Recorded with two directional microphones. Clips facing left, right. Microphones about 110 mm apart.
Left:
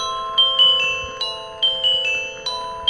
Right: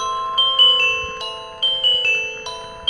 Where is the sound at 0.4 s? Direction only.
40° right (ahead or behind).